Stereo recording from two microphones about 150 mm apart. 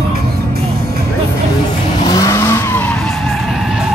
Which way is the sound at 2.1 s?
20° left (ahead or behind).